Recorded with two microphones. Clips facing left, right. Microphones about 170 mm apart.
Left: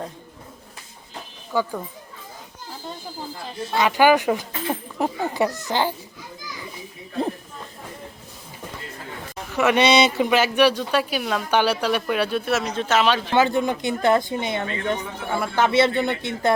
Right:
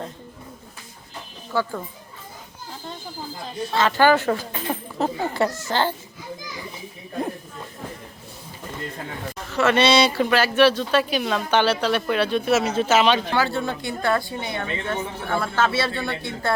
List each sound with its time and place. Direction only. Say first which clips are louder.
1.5 s speech: left 1 dB; 15° left (ahead or behind)
3.8 s speech: left 1 dB; 15° left (ahead or behind)
9.4 s speech: even; 15° left (ahead or behind)
12.5 s speech: right 3 dB; 5° right (ahead or behind)
13.3 s a woman's voice: left 4 dB; 20° left (ahead or behind)